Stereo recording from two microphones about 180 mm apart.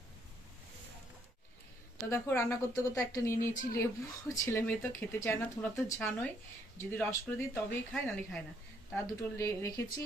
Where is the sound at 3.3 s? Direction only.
50° left (ahead or behind).